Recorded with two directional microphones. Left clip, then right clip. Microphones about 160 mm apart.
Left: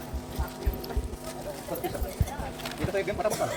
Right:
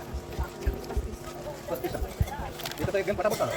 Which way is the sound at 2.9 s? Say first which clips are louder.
Right 1 dB; 65° right (ahead or behind).